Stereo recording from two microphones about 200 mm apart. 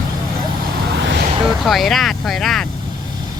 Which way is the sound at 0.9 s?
60° right (ahead or behind).